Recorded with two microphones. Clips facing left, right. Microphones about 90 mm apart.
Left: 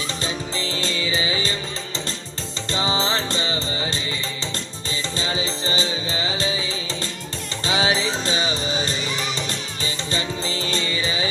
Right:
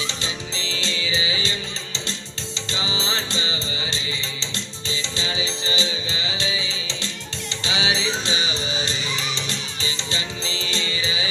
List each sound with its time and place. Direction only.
0.1 s music: 45° left (ahead or behind)